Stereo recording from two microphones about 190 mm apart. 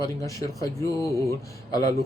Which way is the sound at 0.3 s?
15° left (ahead or behind).